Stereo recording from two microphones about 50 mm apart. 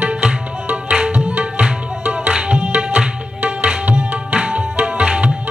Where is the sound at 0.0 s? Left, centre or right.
Right.